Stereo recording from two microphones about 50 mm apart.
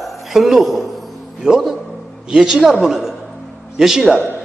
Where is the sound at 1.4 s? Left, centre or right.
Centre.